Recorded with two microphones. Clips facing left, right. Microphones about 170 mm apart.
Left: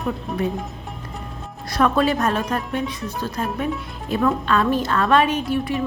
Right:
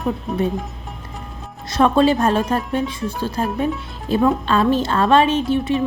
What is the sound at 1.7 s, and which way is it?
A woman's voice, 25° right (ahead or behind).